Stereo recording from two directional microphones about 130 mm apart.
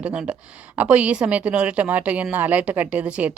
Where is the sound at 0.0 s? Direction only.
10° right (ahead or behind).